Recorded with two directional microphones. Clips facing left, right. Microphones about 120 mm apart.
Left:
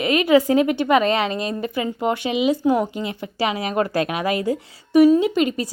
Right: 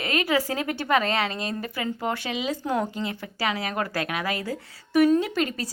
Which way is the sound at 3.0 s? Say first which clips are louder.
Left 5 dB; 20° left (ahead or behind).